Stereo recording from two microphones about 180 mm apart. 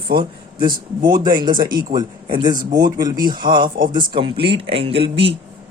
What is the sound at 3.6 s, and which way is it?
Speech, 50° right (ahead or behind).